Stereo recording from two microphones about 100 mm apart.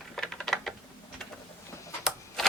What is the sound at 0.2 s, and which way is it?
Typing, 5° left (ahead or behind).